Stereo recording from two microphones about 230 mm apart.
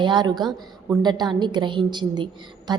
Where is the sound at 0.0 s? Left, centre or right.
Centre.